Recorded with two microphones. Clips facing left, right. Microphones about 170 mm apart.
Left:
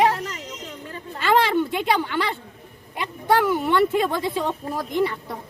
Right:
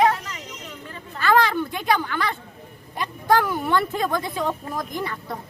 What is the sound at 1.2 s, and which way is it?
Speech, 25° left (ahead or behind).